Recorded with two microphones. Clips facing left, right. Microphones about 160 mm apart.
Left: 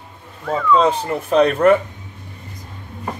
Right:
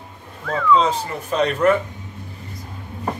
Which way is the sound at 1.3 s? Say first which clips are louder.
Left 5 dB; 55° left (ahead or behind).